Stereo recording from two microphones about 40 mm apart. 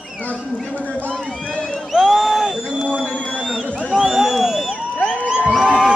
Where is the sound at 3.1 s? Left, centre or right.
Left.